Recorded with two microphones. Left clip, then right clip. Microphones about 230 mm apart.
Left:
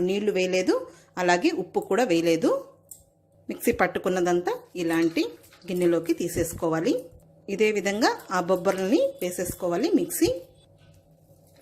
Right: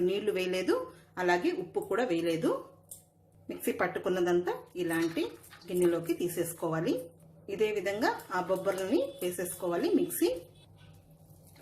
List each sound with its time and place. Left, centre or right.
0.1 s speech: left
3.5 s speech: left